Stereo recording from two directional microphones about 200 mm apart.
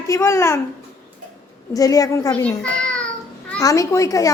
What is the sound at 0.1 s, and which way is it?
Speech, 15° left (ahead or behind).